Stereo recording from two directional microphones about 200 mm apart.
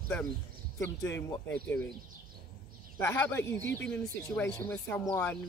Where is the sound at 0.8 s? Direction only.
15° left (ahead or behind).